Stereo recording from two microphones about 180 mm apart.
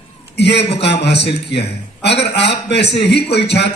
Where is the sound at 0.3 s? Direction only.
70° left (ahead or behind).